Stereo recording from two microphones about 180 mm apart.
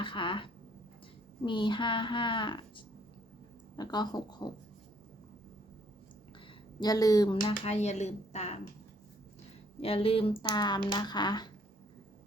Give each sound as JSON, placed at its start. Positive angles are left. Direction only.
{"t": 0.0, "sound": "speech", "side_deg": 25}
{"t": 3.8, "sound": "speech", "side_deg": 20}
{"t": 6.7, "sound": "speech", "side_deg": 20}
{"t": 9.8, "sound": "speech", "side_deg": 30}